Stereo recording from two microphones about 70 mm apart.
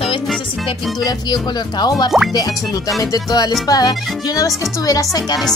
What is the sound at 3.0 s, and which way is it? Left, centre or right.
Speech, left.